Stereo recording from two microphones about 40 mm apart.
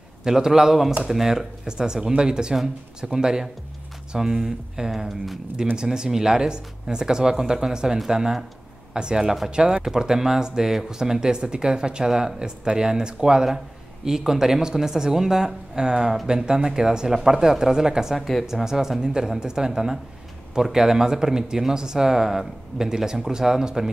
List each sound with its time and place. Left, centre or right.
0.2 s speech: centre
5.0 s speech: centre
5.8 s speech: centre
18.1 s speech: centre
18.5 s speech: centre